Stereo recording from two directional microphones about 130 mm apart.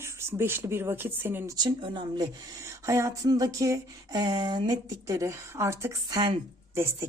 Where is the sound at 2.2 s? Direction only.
25° right (ahead or behind).